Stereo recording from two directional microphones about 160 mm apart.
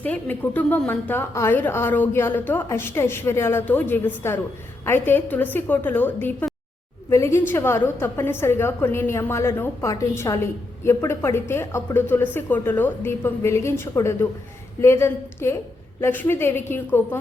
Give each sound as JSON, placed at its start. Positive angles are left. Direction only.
{"t": 0.0, "sound": "a woman's voice", "side_deg": 10}